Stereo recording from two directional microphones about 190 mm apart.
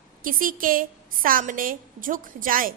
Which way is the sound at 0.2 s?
45° right (ahead or behind).